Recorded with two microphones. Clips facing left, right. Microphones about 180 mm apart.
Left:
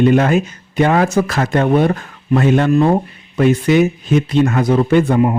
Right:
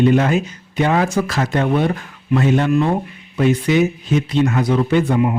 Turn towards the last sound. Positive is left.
turn(degrees=45)  # may be behind; listen again after turning